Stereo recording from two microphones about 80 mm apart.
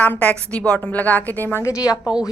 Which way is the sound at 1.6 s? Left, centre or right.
Left.